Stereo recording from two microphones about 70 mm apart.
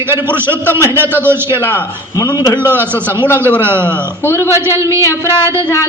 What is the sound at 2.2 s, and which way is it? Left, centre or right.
Speech, left.